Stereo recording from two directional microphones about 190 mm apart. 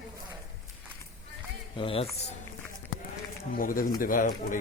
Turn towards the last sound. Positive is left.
turn(degrees=45)  # may be behind; listen again after turning